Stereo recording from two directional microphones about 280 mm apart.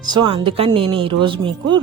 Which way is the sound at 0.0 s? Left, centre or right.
Centre.